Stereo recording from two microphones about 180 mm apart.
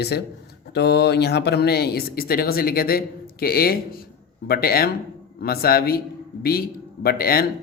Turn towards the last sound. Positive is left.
turn(degrees=55)  # may be behind; listen again after turning